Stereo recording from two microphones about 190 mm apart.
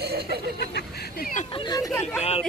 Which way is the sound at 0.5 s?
60° left (ahead or behind).